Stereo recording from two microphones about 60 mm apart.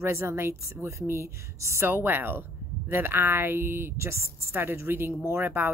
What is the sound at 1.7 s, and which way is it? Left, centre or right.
Speech, right.